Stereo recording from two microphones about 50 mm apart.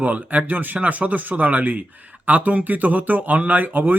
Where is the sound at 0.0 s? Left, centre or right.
Right.